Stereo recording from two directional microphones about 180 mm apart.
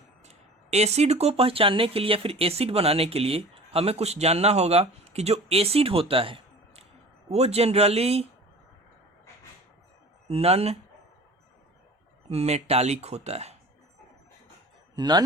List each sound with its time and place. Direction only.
0.3 s speech: 35° right (ahead or behind)
10.2 s speech: 35° right (ahead or behind)
12.3 s speech: 35° right (ahead or behind)
14.9 s a man's voice: 25° right (ahead or behind)